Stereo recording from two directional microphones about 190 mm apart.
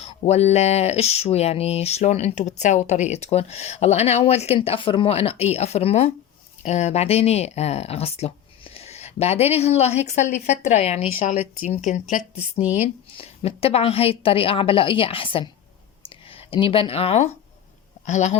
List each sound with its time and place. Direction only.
0.0 s a woman's voice: 35° left (ahead or behind)